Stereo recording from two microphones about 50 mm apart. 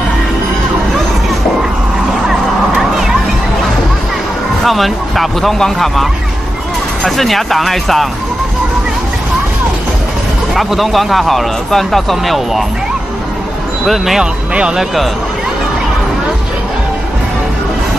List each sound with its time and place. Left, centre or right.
2.7 s a sound: centre
4.6 s speech: centre
7.1 s speech: centre
10.5 s speech: centre
13.8 s speech: centre
14.5 s speech: right